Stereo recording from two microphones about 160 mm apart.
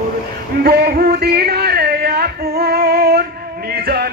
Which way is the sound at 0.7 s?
85° right.